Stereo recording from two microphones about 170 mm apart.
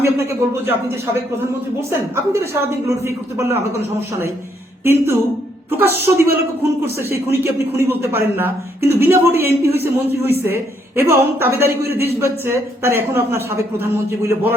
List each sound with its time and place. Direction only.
0.0 s a man's voice: 15° right (ahead or behind)
4.8 s a man's voice: 15° right (ahead or behind)